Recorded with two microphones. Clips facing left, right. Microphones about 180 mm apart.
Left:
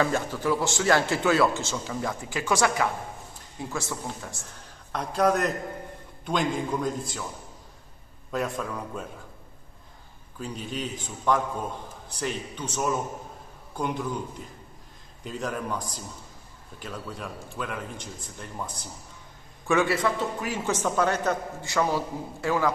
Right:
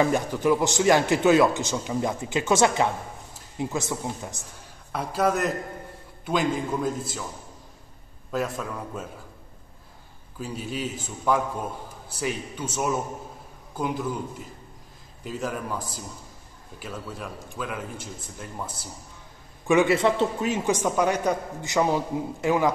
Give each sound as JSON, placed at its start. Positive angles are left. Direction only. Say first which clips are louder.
{"t": 0.0, "sound": "a man's voice", "louder": "right 3 dB", "side_deg": -15}
{"t": 4.9, "sound": "a man's voice", "louder": "left 1 dB", "side_deg": -5}
{"t": 8.3, "sound": "a man's voice", "louder": "right 1 dB", "side_deg": 0}
{"t": 10.4, "sound": "a man's voice", "louder": "right 2 dB", "side_deg": -5}
{"t": 15.2, "sound": "a man's voice", "louder": "right 1 dB", "side_deg": -5}
{"t": 19.6, "sound": "a man's voice", "louder": "right 4 dB", "side_deg": -15}